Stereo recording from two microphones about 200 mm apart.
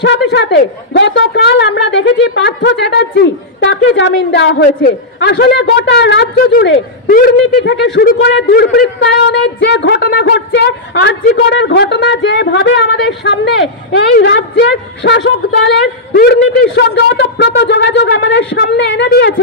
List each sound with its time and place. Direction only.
0.0 s a woman's voice: 60° left (ahead or behind)